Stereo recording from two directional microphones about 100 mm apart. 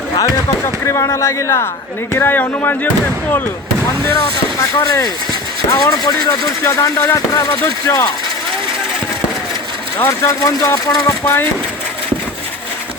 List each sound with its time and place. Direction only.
0.6 s speech: 30° left (ahead or behind)
4.6 s speech: 35° left (ahead or behind)
10.0 s speech: 30° left (ahead or behind)